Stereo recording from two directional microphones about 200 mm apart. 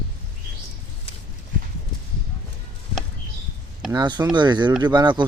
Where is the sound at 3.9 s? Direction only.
20° right (ahead or behind).